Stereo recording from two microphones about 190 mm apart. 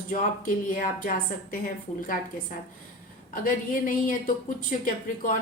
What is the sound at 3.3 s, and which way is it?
A woman's voice, 45° left (ahead or behind).